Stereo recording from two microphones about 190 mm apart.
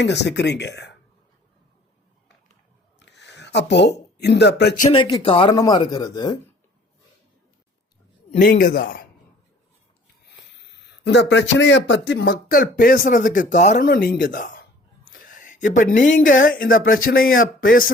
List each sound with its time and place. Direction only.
0.0 s speech: 65° left (ahead or behind)
3.0 s a sound: 65° left (ahead or behind)
4.9 s speech: 25° left (ahead or behind)
8.3 s speech: 45° left (ahead or behind)
10.7 s speech: 65° left (ahead or behind); by 17.9 s 50° left (ahead or behind)